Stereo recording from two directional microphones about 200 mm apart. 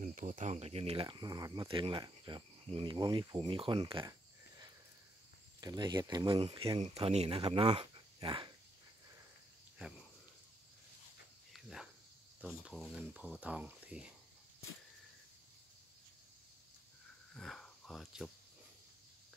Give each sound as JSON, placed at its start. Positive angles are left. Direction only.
{"t": 0.0, "sound": "speech", "side_deg": -40}
{"t": 11.5, "sound": "cricket", "side_deg": 0}
{"t": 12.4, "sound": "speech", "side_deg": -5}
{"t": 17.3, "sound": "a sound", "side_deg": 5}